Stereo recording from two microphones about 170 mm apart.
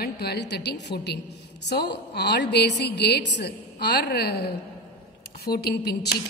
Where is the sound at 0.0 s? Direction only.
70° left (ahead or behind).